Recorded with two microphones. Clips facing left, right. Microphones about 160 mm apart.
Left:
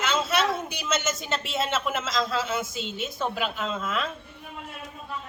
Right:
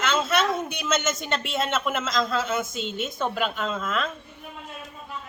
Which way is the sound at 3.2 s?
5° left (ahead or behind).